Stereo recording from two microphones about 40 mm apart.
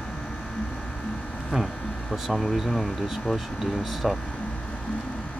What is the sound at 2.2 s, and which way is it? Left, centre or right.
Speech, centre.